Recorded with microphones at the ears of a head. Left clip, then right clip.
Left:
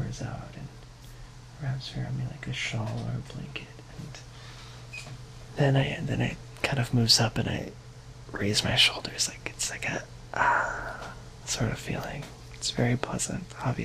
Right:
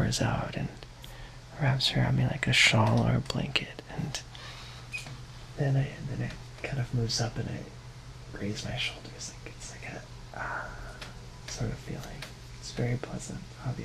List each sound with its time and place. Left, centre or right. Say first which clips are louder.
0.0 s speech: right 9 dB; right
5.6 s speech: left 8 dB; left